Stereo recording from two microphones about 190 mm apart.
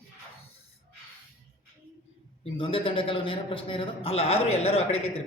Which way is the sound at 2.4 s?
30° left (ahead or behind).